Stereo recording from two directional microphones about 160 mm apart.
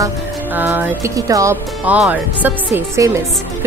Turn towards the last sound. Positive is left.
turn(degrees=-15)  # may be behind; listen again after turning